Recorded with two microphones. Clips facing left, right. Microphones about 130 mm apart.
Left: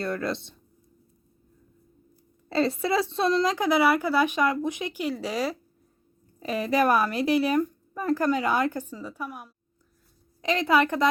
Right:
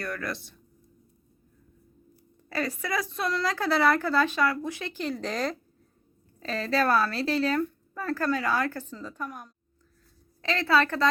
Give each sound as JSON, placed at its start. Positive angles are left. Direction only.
{"t": 0.0, "sound": "speech", "side_deg": 25}
{"t": 2.5, "sound": "a woman's voice", "side_deg": 25}